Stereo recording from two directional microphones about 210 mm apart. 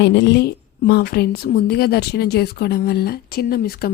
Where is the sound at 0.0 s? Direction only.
55° left (ahead or behind).